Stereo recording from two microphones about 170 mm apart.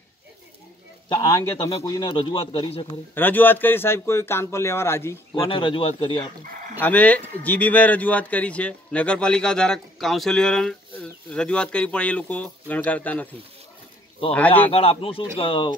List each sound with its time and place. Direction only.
1.0 s a man's voice: 30° left (ahead or behind)
3.2 s a man's voice: 10° left (ahead or behind)
5.4 s speech: 30° left (ahead or behind)
6.8 s a man's voice: 10° left (ahead or behind)
14.3 s a man's voice: 10° left (ahead or behind)
14.7 s speech: 35° left (ahead or behind)